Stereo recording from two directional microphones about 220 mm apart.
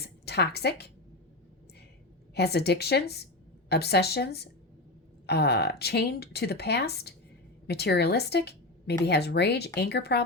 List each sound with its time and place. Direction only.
0.0 s a woman's voice: 50° left (ahead or behind)
2.3 s a woman's voice: 45° left (ahead or behind)